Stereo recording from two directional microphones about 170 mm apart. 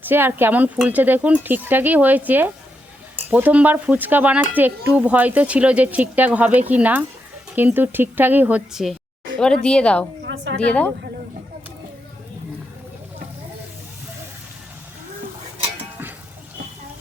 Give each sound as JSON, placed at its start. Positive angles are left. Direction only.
{"t": 0.1, "sound": "speech", "side_deg": -10}
{"t": 10.2, "sound": "a sound", "side_deg": -90}
{"t": 10.6, "sound": "speech", "side_deg": 5}